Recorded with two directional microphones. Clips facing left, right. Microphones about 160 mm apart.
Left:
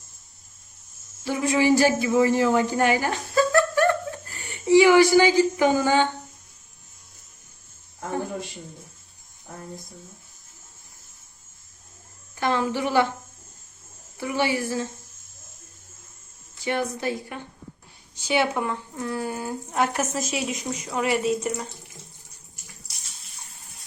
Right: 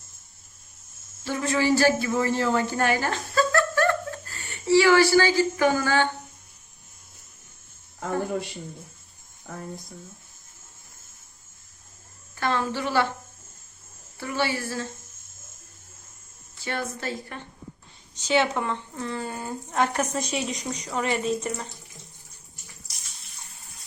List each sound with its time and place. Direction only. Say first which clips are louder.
1.2 s speech: left 3 dB; 15° left (ahead or behind)
12.4 s speech: left 2 dB; 15° left (ahead or behind)
14.2 s speech: left 3 dB; 15° left (ahead or behind)
16.6 s speech: left 5 dB; 15° left (ahead or behind)